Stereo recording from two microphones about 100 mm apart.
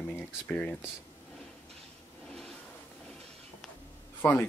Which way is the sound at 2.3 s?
5° left (ahead or behind).